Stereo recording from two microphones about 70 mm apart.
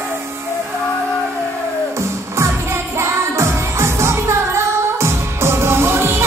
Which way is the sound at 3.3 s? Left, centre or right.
Right.